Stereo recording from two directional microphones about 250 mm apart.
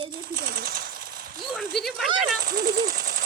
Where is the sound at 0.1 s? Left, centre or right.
Right.